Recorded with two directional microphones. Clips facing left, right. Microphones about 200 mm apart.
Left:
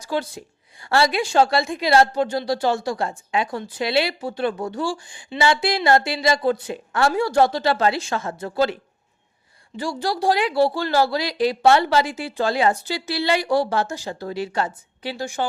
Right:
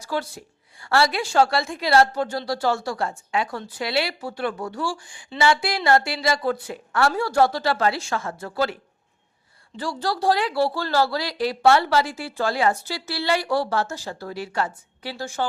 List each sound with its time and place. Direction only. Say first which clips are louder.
0.0 s a woman's voice: left 2 dB; 20° left (ahead or behind)